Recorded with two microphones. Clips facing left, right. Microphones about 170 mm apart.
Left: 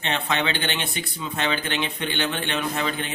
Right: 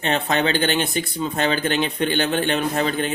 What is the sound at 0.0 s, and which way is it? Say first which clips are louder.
Speech: right 5 dB; 40° right (ahead or behind).